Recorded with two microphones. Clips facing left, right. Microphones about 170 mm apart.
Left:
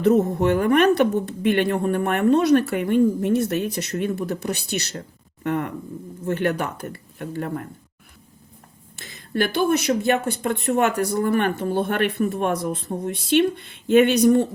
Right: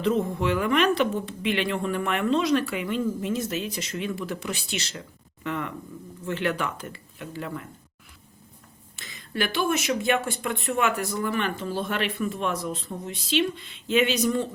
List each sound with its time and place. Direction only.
0.0 s speech: 45° left (ahead or behind); by 3.8 s 65° left (ahead or behind)
3.9 s speech: 50° left (ahead or behind)
9.3 s speech: 45° left (ahead or behind); by 14.3 s 60° left (ahead or behind)